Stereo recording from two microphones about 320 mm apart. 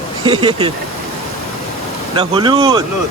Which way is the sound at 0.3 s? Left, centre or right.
Centre.